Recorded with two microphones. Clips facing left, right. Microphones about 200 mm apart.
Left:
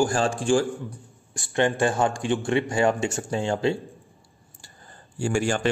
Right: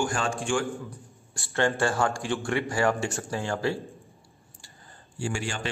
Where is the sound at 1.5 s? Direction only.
20° left (ahead or behind).